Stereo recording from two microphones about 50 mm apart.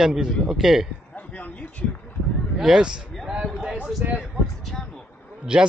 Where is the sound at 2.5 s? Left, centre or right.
Centre.